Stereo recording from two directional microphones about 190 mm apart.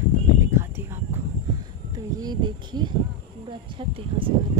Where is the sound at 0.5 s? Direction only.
15° right (ahead or behind).